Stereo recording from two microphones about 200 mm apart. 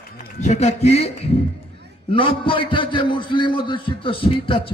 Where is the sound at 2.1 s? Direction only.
25° left (ahead or behind).